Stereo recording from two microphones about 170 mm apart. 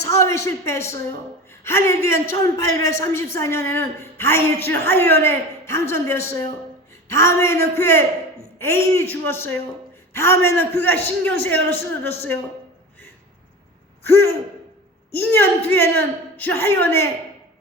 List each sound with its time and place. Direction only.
0.0 s a man's voice: 20° left (ahead or behind)
15.1 s a man's voice: 10° left (ahead or behind)